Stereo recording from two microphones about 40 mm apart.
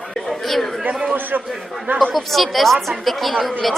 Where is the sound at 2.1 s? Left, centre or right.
Centre.